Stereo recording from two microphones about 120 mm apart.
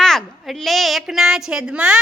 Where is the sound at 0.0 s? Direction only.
5° left (ahead or behind).